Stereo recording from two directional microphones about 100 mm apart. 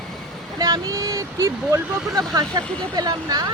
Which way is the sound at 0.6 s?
40° right (ahead or behind).